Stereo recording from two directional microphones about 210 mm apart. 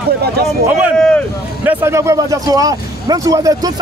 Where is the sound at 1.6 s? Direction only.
15° right (ahead or behind).